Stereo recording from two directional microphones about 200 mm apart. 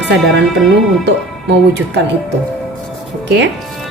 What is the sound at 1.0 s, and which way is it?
Speech, 60° right (ahead or behind).